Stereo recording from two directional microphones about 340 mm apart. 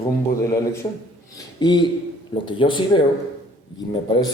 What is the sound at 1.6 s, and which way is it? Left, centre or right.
Speech, centre.